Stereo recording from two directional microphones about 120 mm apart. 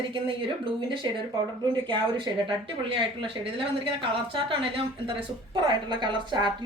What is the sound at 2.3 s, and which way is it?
Speech, 30° right (ahead or behind).